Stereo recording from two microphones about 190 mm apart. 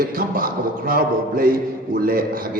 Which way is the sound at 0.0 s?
50° right (ahead or behind).